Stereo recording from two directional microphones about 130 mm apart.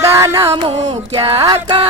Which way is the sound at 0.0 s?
20° right (ahead or behind).